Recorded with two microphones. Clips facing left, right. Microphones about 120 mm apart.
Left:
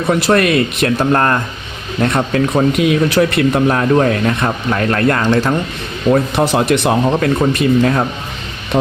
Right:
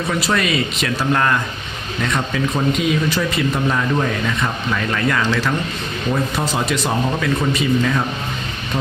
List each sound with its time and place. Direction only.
0.1 s speech: 55° left (ahead or behind)
6.1 s speech: 65° left (ahead or behind)